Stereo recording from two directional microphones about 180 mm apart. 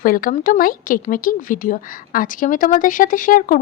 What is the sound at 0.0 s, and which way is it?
Speech, 50° left (ahead or behind).